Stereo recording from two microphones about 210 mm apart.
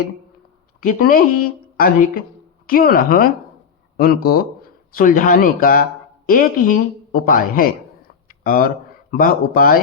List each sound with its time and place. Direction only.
0.8 s a woman's voice: 40° left (ahead or behind)